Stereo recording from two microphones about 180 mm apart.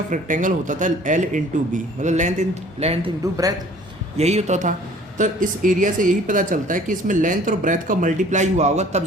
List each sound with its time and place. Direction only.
0.1 s speech: 45° right (ahead or behind)
4.2 s speech: 35° right (ahead or behind)